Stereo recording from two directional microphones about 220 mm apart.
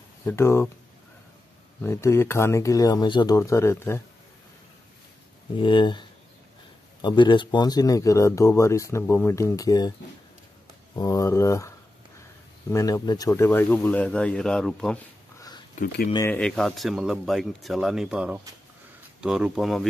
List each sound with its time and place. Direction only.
0.2 s speech: 10° left (ahead or behind)
1.8 s speech: 10° left (ahead or behind)
5.6 s speech: 20° left (ahead or behind)
11.0 s speech: 15° left (ahead or behind)
15.7 s speech: 40° left (ahead or behind)
16.3 s speech: 5° left (ahead or behind)